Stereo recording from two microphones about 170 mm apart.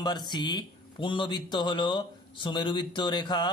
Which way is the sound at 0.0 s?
25° left (ahead or behind).